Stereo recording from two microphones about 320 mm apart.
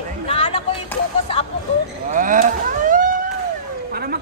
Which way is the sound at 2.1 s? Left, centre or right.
Right.